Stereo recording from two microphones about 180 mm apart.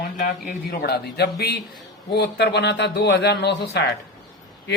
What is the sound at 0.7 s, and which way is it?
A man's voice, 65° left (ahead or behind).